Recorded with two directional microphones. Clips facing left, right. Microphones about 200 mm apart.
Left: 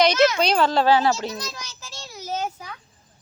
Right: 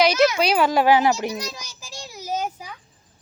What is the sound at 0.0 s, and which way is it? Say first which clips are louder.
A child's voice: even; 10° right (ahead or behind).